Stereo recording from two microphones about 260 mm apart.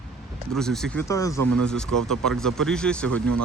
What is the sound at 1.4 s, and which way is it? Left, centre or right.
Speech, right.